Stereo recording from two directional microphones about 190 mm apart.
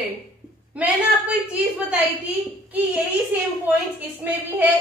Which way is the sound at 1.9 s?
10° right (ahead or behind).